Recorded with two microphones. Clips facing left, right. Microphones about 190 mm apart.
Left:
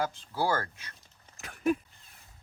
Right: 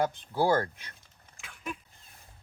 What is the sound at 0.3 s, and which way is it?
Speech, 20° right (ahead or behind).